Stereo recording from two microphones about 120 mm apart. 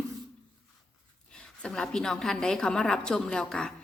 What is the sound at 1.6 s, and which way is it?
A woman's voice, 5° left (ahead or behind).